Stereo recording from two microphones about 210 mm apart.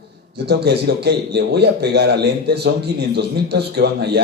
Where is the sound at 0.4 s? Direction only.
50° right (ahead or behind).